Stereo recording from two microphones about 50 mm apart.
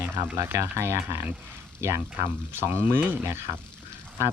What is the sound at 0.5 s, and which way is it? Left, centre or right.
Speech, right.